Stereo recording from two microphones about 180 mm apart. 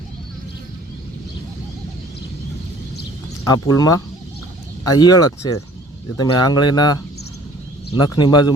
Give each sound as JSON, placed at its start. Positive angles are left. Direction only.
{"t": 3.4, "sound": "speech", "side_deg": 20}